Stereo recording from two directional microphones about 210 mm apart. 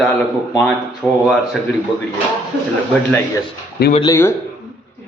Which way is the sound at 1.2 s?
Centre (ahead or behind).